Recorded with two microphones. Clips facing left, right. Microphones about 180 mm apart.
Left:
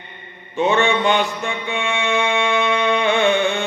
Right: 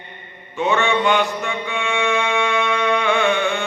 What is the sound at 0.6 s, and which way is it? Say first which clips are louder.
Mantra: left 1 dB; 30° left (ahead or behind).